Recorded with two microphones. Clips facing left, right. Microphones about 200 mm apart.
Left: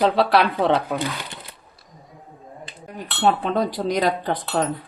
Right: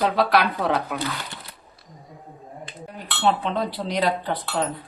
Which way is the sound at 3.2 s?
45° left (ahead or behind).